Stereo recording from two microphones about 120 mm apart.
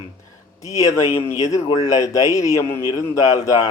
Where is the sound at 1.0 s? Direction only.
60° left (ahead or behind).